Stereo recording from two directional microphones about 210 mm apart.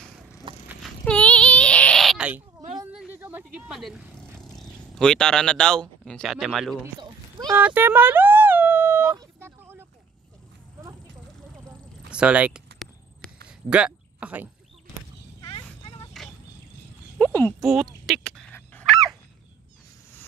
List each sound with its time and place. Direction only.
0.7 s a sound: 5° left (ahead or behind)
2.8 s vehicle: 5° right (ahead or behind)
4.4 s speech: centre (ahead or behind)
7.0 s cat: 20° right (ahead or behind)
7.6 s a sound: 10° right (ahead or behind)
12.1 s speech: 5° right (ahead or behind)
13.5 s a sound: 5° right (ahead or behind)
15.4 s vehicle: 20° left (ahead or behind)
17.2 s speech: 10° left (ahead or behind)
18.0 s honk: 5° left (ahead or behind)